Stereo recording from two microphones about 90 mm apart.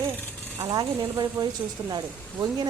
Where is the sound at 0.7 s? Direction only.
50° right (ahead or behind).